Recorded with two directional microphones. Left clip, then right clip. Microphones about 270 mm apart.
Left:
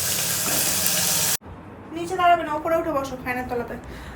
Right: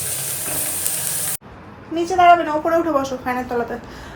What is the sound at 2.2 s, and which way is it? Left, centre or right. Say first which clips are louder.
Speech: right 7 dB; centre.